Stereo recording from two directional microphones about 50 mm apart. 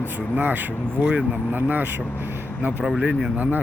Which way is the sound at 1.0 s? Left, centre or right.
Right.